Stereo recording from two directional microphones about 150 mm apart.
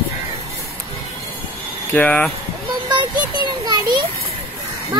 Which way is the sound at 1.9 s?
10° left (ahead or behind).